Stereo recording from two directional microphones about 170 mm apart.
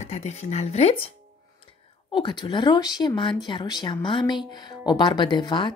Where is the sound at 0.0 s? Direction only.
40° left (ahead or behind).